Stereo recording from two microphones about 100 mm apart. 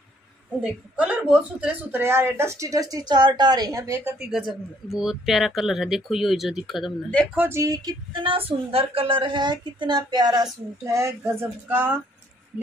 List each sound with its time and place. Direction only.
0.6 s a woman's voice: 15° right (ahead or behind); by 4.0 s 35° right (ahead or behind)
4.9 s speech: 5° right (ahead or behind)
7.3 s a woman's voice: 25° right (ahead or behind)
7.6 s music: 40° right (ahead or behind)
8.1 s a woman's voice: 60° right (ahead or behind); by 10.4 s 40° right (ahead or behind)
10.8 s a woman's voice: 30° right (ahead or behind)